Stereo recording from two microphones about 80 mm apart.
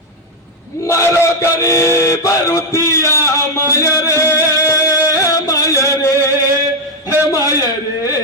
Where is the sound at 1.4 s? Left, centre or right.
Left.